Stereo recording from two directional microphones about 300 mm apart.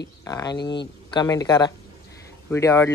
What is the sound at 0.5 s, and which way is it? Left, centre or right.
Speech, left.